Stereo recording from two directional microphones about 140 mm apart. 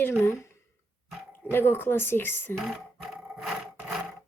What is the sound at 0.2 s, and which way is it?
Speech, 20° left (ahead or behind).